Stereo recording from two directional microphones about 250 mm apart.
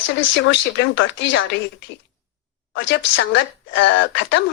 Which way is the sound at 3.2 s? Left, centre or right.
Left.